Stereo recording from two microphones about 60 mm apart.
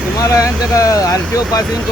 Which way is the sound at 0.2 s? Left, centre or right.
Left.